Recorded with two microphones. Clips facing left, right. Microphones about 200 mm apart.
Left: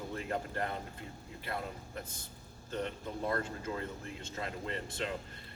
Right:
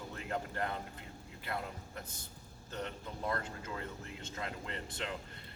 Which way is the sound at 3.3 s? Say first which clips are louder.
Left 3 dB; 30° left (ahead or behind).